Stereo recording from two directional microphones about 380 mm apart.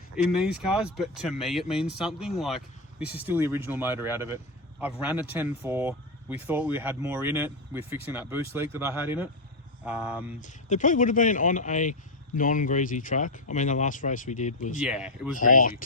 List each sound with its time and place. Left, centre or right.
0.2 s speech: centre
10.4 s speech: centre
14.8 s speech: centre
15.4 s speech: left